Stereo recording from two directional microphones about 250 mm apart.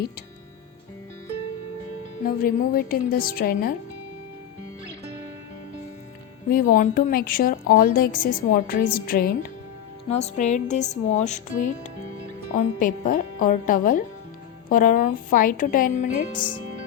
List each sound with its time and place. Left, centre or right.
2.2 s a woman's voice: left
6.5 s a woman's voice: left
10.1 s music: left
12.5 s a woman's voice: left